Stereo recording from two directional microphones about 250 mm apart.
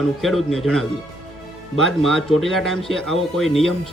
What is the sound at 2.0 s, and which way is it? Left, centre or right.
Speech, centre.